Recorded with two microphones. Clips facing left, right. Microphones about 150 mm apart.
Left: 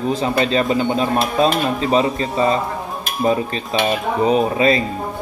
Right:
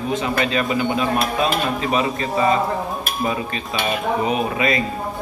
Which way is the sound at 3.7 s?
30° left (ahead or behind).